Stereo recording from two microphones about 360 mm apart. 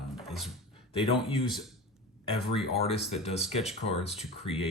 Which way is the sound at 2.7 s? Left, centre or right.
Centre.